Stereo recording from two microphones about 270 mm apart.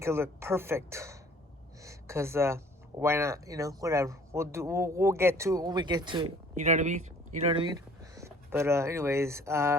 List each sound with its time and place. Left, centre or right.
0.0 s speech: centre
1.8 s a sound: centre
3.0 s speech: centre
6.5 s speech: right
8.1 s speech: centre